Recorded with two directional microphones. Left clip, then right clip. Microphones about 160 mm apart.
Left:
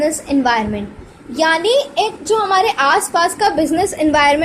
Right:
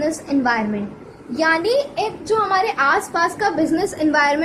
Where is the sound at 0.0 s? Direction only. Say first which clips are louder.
Left 4 dB; 35° left (ahead or behind).